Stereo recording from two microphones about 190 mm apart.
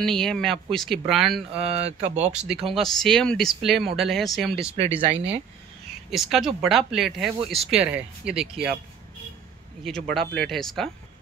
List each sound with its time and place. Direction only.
0.0 s speech: centre (ahead or behind)
1.9 s speech: 35° right (ahead or behind)
2.6 s speech: centre (ahead or behind)
4.7 s speech: 35° right (ahead or behind)
6.0 s speech: centre (ahead or behind)
9.8 s speech: centre (ahead or behind)